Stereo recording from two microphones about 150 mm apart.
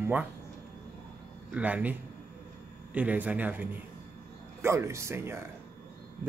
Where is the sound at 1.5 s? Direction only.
10° right (ahead or behind).